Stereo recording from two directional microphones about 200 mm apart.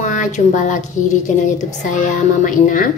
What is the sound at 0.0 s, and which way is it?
Speech, 40° left (ahead or behind).